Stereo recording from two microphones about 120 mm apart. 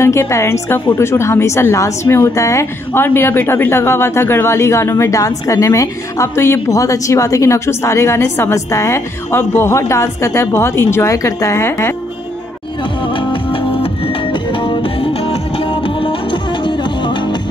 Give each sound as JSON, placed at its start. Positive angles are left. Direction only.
{"t": 0.0, "sound": "a woman's voice", "side_deg": 25}
{"t": 13.1, "sound": "music", "side_deg": 45}